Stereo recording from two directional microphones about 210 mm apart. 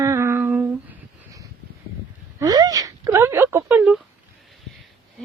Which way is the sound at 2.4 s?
15° right (ahead or behind).